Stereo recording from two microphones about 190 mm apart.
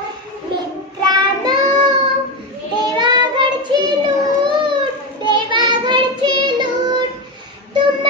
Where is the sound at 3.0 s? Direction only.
20° right (ahead or behind).